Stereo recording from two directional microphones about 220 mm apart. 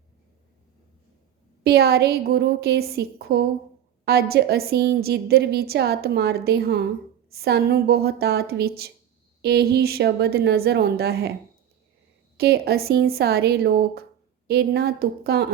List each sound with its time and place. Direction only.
1.6 s a woman's voice: 45° right (ahead or behind)
12.4 s a woman's voice: 45° right (ahead or behind)